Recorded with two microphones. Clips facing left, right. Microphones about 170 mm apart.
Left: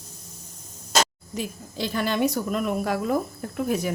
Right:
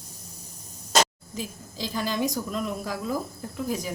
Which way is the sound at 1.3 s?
65° left (ahead or behind).